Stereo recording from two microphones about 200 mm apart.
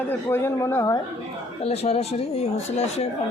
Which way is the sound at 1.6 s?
30° left (ahead or behind).